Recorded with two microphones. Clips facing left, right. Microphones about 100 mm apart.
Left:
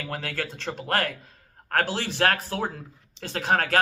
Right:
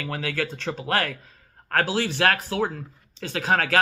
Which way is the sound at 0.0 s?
40° left (ahead or behind).